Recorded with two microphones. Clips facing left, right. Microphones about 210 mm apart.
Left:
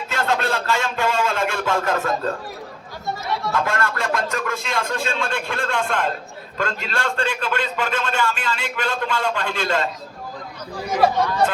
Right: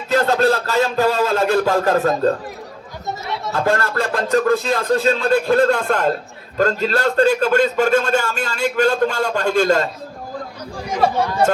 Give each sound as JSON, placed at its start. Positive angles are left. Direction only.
{"t": 0.1, "sound": "a man's voice", "side_deg": -35}
{"t": 3.5, "sound": "a man's voice", "side_deg": -35}